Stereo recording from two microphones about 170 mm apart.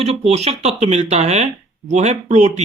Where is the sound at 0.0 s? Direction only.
40° right (ahead or behind).